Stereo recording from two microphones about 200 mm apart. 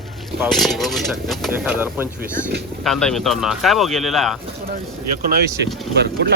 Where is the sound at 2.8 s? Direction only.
Centre (ahead or behind).